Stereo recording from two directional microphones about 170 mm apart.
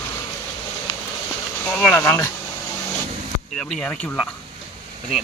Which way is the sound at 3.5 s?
5° left (ahead or behind).